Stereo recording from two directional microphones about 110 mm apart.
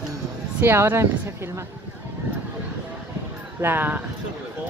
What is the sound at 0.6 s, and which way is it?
Speech, 20° right (ahead or behind).